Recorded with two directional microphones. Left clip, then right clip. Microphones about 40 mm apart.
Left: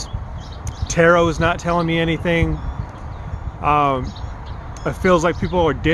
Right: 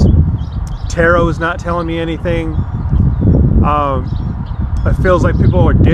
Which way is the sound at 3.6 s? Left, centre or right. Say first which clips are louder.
Even; left.